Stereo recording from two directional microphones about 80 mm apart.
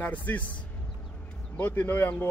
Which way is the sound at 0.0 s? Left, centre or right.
Left.